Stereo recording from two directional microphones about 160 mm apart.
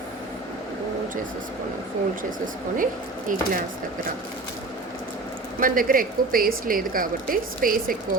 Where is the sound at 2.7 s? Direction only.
55° right (ahead or behind).